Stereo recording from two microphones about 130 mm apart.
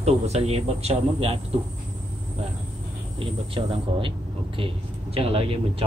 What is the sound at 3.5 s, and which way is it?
Speech, 45° right (ahead or behind).